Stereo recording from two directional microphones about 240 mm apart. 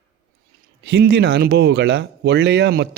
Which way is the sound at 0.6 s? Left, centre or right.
Right.